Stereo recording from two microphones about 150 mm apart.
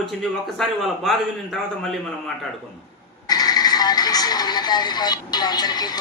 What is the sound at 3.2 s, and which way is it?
Speech, 25° left (ahead or behind).